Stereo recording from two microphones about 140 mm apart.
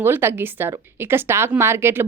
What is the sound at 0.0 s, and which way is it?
Speech, 15° right (ahead or behind).